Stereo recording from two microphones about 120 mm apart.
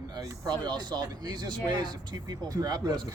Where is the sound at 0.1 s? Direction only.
35° right (ahead or behind).